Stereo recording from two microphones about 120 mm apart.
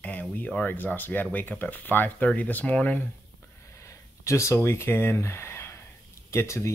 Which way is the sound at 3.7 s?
25° left (ahead or behind).